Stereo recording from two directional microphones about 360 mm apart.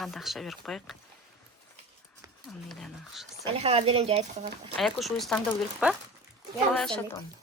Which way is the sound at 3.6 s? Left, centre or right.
Centre.